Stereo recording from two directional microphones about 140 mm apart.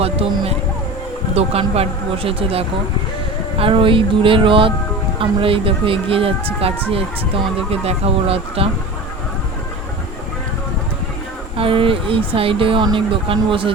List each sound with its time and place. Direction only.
0.0 s speech: 45° right (ahead or behind)
11.5 s speech: 40° right (ahead or behind)